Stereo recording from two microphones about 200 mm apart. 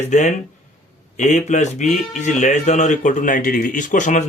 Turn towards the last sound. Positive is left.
turn(degrees=40)  # may be behind; listen again after turning